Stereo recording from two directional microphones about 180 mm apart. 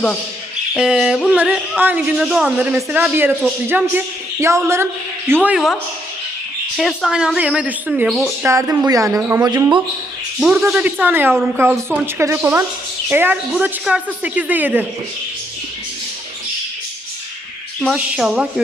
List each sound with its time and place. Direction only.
0.7 s speech: 5° right (ahead or behind)
6.7 s speech: centre (ahead or behind)
8.4 s speech: 15° right (ahead or behind)
10.4 s speech: 5° right (ahead or behind)
17.7 s speech: centre (ahead or behind)